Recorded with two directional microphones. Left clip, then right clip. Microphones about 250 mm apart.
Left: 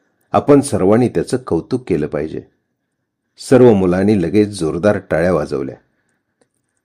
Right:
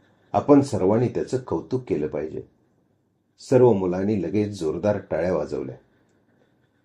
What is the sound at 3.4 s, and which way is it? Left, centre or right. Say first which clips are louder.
Speech: left 8 dB; left.